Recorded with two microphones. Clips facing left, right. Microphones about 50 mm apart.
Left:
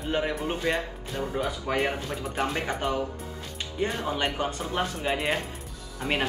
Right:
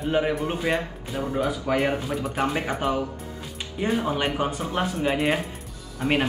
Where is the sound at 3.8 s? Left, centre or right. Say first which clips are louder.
Right 3 dB; centre.